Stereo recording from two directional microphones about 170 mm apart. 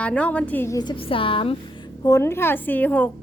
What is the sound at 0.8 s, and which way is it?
Speech, 30° left (ahead or behind).